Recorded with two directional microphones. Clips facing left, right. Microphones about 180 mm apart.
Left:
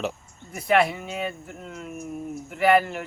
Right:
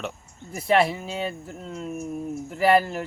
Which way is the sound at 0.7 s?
30° right (ahead or behind).